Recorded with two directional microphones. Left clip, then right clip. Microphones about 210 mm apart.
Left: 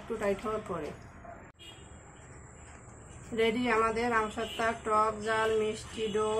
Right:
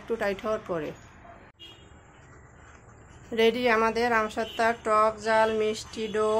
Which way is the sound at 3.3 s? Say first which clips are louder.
Right 5 dB; 50° right (ahead or behind).